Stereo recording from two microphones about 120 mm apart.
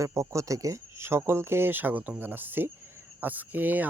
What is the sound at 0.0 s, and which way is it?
Speech, 25° right (ahead or behind).